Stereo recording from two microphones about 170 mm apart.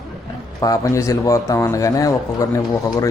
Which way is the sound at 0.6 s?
20° left (ahead or behind).